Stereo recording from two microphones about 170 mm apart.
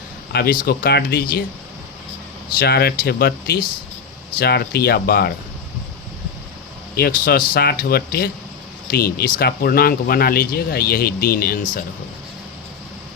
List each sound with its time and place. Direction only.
0.6 s speech: 60° left (ahead or behind)
2.6 s speech: 70° left (ahead or behind)
6.9 s speech: 65° left (ahead or behind)